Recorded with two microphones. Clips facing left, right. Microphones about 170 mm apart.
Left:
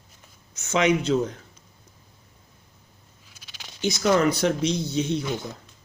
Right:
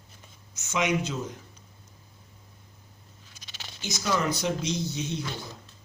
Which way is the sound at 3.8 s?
60° left (ahead or behind).